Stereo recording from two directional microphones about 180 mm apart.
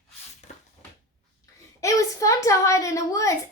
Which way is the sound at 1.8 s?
20° left (ahead or behind).